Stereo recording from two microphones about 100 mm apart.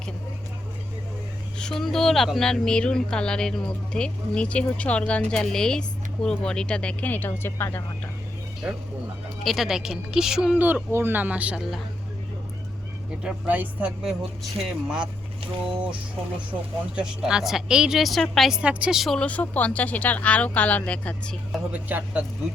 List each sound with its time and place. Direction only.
1.5 s speech: 5° left (ahead or behind); by 7.8 s 25° left (ahead or behind)
8.6 s speech: 10° right (ahead or behind)
13.2 s speech: 15° right (ahead or behind)
14.0 s speech: 5° right (ahead or behind)
16.9 s speech: 10° right (ahead or behind)
19.1 s speech: 15° left (ahead or behind)
21.7 s speech: 15° right (ahead or behind)